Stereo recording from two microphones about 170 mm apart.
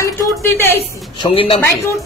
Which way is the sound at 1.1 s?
30° left (ahead or behind).